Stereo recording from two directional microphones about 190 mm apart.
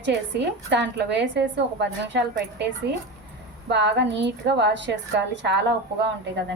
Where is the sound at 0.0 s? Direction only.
65° right (ahead or behind).